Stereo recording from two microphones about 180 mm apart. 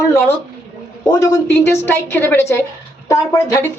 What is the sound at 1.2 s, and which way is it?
Speech, 15° left (ahead or behind).